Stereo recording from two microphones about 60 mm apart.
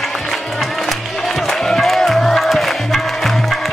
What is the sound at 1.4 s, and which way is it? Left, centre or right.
Music, centre.